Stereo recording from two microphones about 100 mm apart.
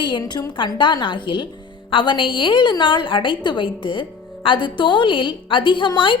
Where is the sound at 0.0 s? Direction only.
50° left (ahead or behind).